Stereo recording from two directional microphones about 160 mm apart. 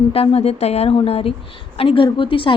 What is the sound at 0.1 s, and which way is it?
A woman's voice, 35° left (ahead or behind).